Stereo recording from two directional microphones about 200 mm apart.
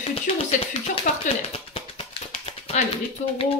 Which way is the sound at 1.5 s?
30° left (ahead or behind).